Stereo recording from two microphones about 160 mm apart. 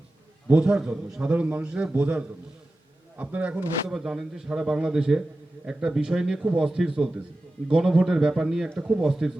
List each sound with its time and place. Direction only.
0.4 s a man's voice: 5° right (ahead or behind)